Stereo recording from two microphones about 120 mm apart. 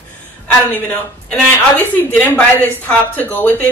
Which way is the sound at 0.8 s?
15° left (ahead or behind).